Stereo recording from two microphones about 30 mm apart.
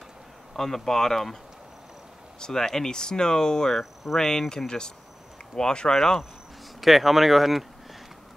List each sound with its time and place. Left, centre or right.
0.6 s speech: centre
2.4 s speech: left
5.9 s speech: centre
6.8 s speech: centre